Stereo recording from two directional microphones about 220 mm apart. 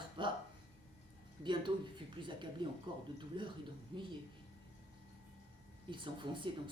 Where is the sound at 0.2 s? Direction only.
20° right (ahead or behind).